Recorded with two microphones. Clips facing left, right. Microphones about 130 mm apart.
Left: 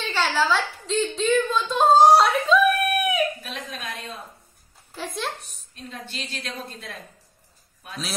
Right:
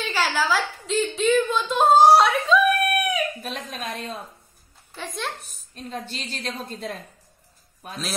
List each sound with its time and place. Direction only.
0.0 s a sound: 10° right (ahead or behind)
3.4 s speech: 40° right (ahead or behind)
4.9 s a woman's voice: 5° left (ahead or behind)
5.8 s a woman's voice: 45° right (ahead or behind)